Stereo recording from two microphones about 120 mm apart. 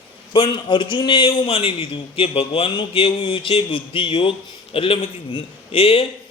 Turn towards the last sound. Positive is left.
turn(degrees=50)  # may be behind; listen again after turning